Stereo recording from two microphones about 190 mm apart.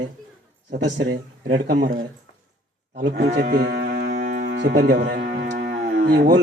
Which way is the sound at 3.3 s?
60° right (ahead or behind).